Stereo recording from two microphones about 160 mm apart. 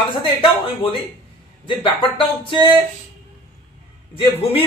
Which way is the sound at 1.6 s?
30° left (ahead or behind).